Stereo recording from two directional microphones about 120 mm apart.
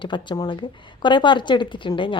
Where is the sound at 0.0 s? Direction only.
40° left (ahead or behind).